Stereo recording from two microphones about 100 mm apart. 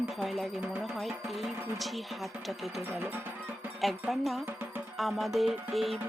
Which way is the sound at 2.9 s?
25° right (ahead or behind).